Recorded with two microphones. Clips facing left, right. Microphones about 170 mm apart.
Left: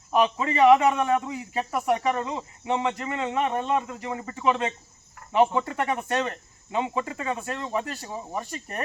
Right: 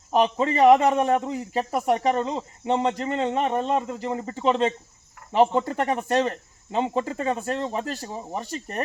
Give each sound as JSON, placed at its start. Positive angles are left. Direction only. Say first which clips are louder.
{"t": 0.1, "sound": "a man's voice", "louder": "right 2 dB", "side_deg": -35}